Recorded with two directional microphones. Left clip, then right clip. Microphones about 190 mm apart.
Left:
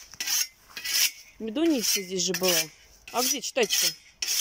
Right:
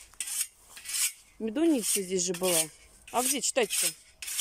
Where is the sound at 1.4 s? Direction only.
5° right (ahead or behind).